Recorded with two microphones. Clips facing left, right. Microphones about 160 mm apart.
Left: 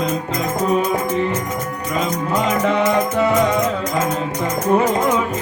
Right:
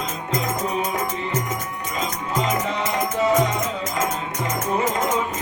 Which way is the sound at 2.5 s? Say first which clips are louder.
Left 7 dB; 60° left (ahead or behind).